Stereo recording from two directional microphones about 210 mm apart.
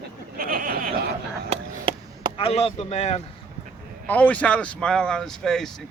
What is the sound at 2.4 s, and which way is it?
Speech, 30° left (ahead or behind).